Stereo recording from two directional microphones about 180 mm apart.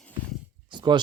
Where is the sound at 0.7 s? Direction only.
25° right (ahead or behind).